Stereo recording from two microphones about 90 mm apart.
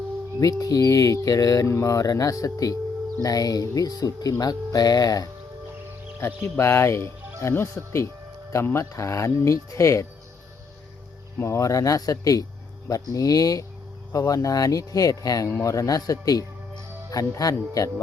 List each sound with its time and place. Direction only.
0.6 s speech: 40° left (ahead or behind)
6.1 s speech: 30° left (ahead or behind)
11.3 s speech: 35° left (ahead or behind)